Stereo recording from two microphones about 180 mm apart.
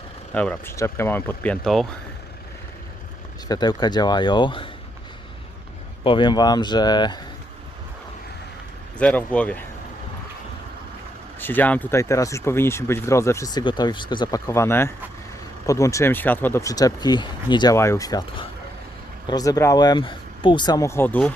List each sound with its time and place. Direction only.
0.3 s speech: 10° left (ahead or behind)
3.5 s speech: 20° left (ahead or behind)
6.0 s speech: 25° left (ahead or behind)
9.0 s speech: 5° left (ahead or behind)
11.3 s speech: 10° left (ahead or behind)